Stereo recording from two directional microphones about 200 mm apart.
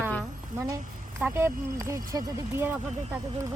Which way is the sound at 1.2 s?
10° right (ahead or behind).